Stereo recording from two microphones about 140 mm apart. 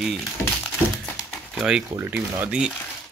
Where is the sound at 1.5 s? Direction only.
5° right (ahead or behind).